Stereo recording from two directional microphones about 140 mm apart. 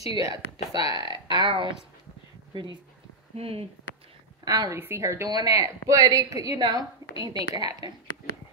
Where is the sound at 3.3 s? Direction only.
45° right (ahead or behind).